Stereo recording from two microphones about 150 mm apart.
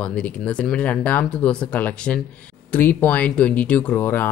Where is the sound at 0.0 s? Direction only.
10° left (ahead or behind).